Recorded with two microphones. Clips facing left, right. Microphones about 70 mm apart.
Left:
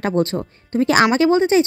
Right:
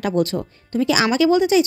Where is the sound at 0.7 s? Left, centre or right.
Left.